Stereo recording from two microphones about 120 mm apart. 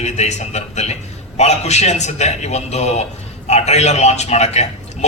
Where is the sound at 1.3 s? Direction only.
65° left (ahead or behind).